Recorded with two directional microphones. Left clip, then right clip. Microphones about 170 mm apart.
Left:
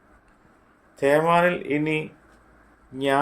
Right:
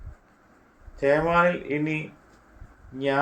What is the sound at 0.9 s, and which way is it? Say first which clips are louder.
Speech: left 2 dB; 65° left (ahead or behind).